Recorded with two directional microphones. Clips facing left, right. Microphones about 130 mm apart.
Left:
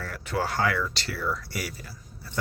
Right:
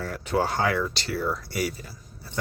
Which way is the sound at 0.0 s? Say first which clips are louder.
Right 4 dB; 20° right (ahead or behind).